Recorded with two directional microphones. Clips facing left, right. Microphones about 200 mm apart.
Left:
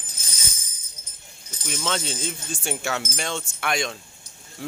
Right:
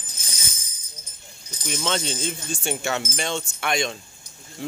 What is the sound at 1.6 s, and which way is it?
Speech, centre (ahead or behind).